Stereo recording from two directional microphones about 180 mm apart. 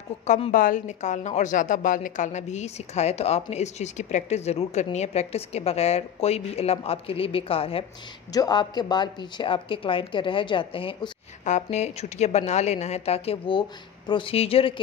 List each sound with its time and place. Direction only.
0.3 s a woman's voice: 45° left (ahead or behind); by 11.1 s 30° left (ahead or behind)
11.4 s a woman's voice: 40° left (ahead or behind)